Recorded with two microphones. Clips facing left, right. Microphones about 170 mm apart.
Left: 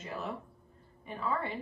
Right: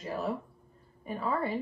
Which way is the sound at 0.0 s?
35° right (ahead or behind).